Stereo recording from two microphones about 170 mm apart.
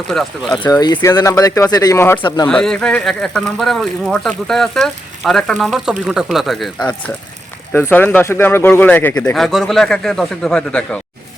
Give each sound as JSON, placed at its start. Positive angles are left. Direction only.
{"t": 0.5, "sound": "speech", "side_deg": 20}
{"t": 2.2, "sound": "speech", "side_deg": 25}
{"t": 2.5, "sound": "speech", "side_deg": 5}
{"t": 9.3, "sound": "speech", "side_deg": 0}